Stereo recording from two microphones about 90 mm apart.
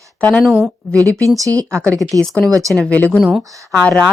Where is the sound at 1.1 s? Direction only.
40° right (ahead or behind).